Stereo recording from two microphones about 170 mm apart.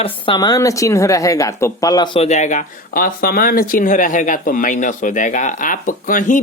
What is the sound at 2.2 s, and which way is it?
A man's voice, 45° left (ahead or behind).